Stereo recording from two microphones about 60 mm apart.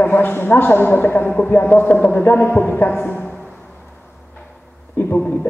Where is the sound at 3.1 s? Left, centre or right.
Centre.